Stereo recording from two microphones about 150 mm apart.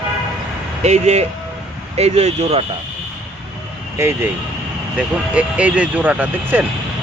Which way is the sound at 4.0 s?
20° right (ahead or behind).